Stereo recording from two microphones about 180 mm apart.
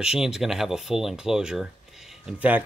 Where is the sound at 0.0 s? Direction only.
5° right (ahead or behind).